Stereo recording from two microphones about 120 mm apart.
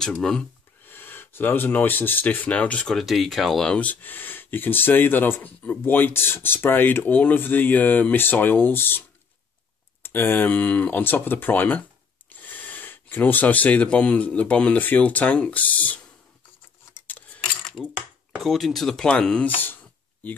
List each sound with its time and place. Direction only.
0.0 s speech: 5° left (ahead or behind)
0.8 s speech: 15° left (ahead or behind)
10.0 s speech: 20° left (ahead or behind)
17.1 s cutlery: 5° left (ahead or behind)
17.8 s a sound: 10° right (ahead or behind)
18.5 s speech: centre (ahead or behind)